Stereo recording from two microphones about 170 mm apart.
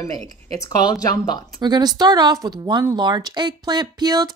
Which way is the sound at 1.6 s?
25° right (ahead or behind).